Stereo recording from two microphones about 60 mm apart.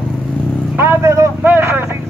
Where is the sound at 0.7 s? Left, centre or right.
Right.